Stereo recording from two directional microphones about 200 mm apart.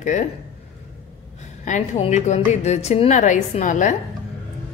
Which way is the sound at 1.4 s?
35° left (ahead or behind).